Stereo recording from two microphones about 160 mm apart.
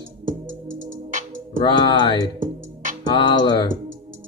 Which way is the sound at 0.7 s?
55° right (ahead or behind).